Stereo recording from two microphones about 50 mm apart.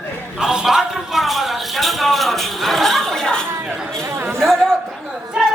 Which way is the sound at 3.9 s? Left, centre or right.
Right.